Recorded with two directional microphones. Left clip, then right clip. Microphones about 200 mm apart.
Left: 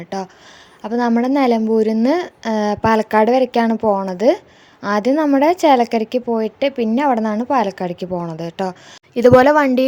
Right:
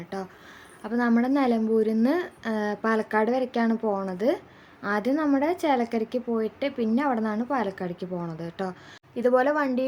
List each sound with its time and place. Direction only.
0.1 s a woman's voice: 35° left (ahead or behind)
9.1 s a woman's voice: 50° left (ahead or behind)